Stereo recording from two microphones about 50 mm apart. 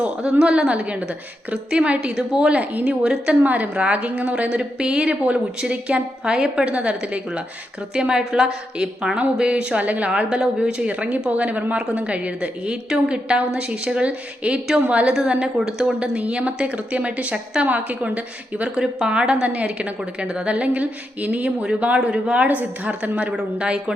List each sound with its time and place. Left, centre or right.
0.0 s a woman's voice: right
2.1 s a woman's voice: centre
2.5 s a woman's voice: right
3.0 s a woman's voice: centre
3.4 s a woman's voice: right
4.4 s a woman's voice: right
15.3 s a woman's voice: centre
16.1 s a woman's voice: right
18.8 s a woman's voice: centre; by 21.5 s right
21.6 s a woman's voice: centre
22.4 s a woman's voice: right